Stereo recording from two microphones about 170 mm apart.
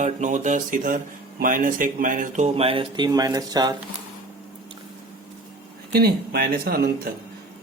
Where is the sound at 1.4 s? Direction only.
55° right (ahead or behind); by 3.8 s 20° right (ahead or behind).